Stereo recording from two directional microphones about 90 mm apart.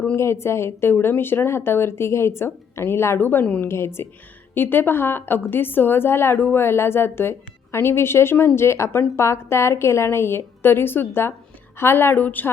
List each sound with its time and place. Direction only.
0.2 s a woman's voice: 30° left (ahead or behind)